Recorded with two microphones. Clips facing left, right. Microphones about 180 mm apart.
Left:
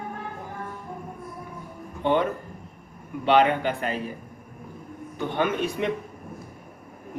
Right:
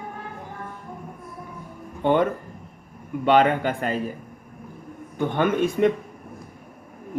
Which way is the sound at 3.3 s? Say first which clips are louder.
Right 2 dB; 45° right (ahead or behind).